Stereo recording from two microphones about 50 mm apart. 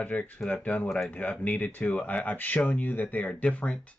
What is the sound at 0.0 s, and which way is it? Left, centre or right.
Speech, left.